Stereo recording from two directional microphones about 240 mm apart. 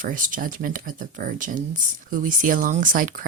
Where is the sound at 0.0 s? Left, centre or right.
Right.